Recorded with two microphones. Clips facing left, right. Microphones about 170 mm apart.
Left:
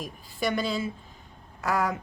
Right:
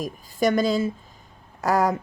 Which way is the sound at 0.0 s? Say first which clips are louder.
Right 7 dB; 45° right (ahead or behind).